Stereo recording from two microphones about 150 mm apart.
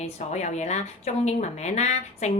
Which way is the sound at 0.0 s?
50° left (ahead or behind).